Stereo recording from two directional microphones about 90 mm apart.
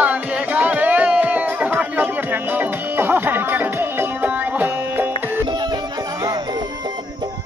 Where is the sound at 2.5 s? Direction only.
20° right (ahead or behind).